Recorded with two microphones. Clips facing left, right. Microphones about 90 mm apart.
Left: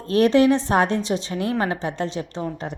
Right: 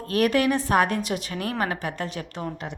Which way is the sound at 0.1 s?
25° left (ahead or behind).